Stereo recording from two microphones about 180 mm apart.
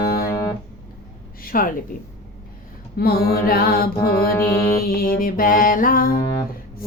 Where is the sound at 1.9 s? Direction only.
50° left (ahead or behind).